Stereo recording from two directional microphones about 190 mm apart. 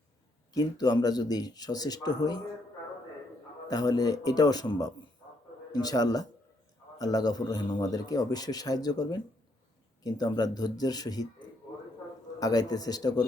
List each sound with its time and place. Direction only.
0.5 s a man's voice: 20° left (ahead or behind)
3.7 s a man's voice: 20° left (ahead or behind)
12.4 s a man's voice: 20° left (ahead or behind)